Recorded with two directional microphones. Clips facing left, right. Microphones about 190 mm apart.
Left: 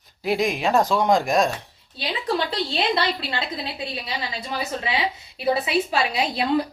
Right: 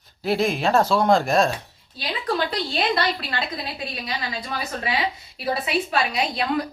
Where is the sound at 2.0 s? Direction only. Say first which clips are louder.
Even; 25° left (ahead or behind).